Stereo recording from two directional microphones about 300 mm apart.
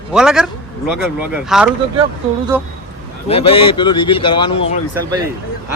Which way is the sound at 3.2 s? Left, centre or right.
Centre.